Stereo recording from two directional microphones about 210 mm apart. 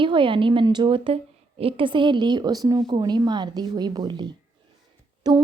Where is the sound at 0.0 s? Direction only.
25° right (ahead or behind).